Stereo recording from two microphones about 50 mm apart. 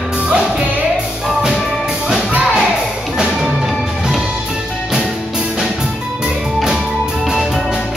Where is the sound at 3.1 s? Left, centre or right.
Centre.